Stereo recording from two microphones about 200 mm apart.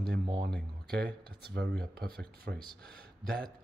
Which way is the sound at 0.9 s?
55° right (ahead or behind).